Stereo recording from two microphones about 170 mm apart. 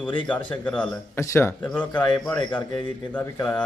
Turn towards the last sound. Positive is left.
turn(degrees=10)  # may be behind; listen again after turning